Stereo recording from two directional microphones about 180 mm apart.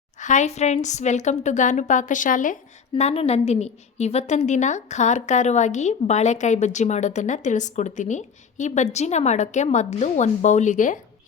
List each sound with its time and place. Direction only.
0.2 s a woman's voice: 40° left (ahead or behind)
2.9 s a woman's voice: 35° left (ahead or behind)